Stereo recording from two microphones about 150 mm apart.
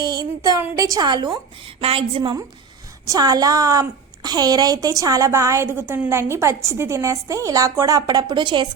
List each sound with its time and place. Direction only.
0.0 s child singing: 25° right (ahead or behind)
0.8 s a woman's voice: 25° right (ahead or behind)
3.1 s a woman's voice: 25° right (ahead or behind)